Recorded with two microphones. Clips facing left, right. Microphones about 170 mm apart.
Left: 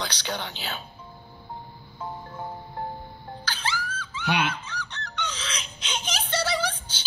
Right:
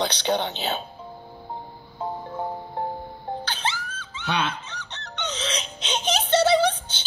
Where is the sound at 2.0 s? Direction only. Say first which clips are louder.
Right 6 dB; 35° right (ahead or behind).